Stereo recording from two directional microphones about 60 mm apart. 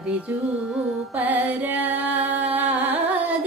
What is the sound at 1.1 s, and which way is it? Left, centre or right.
Music, right.